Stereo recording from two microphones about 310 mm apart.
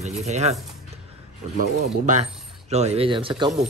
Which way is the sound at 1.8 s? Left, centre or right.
Right.